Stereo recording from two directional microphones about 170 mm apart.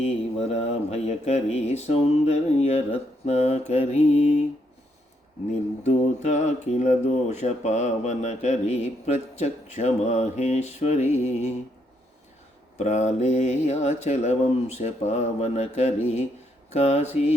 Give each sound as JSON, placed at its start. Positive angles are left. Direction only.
{"t": 0.0, "sound": "speech", "side_deg": 40}
{"t": 5.5, "sound": "speech", "side_deg": 40}
{"t": 12.8, "sound": "speech", "side_deg": 40}